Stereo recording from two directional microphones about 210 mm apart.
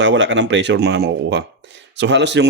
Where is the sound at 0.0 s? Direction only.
60° right (ahead or behind).